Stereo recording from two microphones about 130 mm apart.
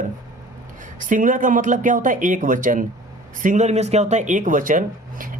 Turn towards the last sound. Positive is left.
turn(degrees=-90)